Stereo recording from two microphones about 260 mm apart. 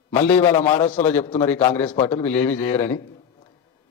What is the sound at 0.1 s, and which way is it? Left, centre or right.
A man's voice, centre.